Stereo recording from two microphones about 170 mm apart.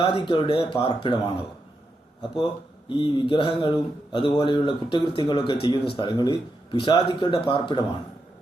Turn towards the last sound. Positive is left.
turn(degrees=30)  # may be behind; listen again after turning